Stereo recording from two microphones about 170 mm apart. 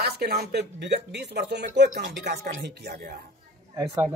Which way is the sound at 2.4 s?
55° right (ahead or behind).